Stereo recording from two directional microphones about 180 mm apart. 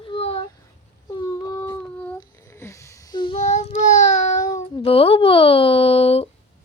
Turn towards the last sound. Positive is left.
turn(degrees=35)  # may be behind; listen again after turning